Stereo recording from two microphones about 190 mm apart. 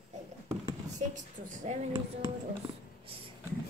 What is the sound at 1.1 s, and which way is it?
Speech, 40° right (ahead or behind).